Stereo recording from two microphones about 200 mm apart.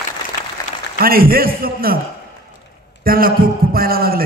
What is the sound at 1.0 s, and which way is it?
A man's voice, 50° right (ahead or behind).